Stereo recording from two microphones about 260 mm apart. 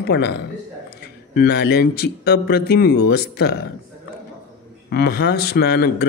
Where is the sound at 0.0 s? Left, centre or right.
Left.